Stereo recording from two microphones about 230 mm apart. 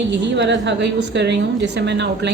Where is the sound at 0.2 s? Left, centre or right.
Right.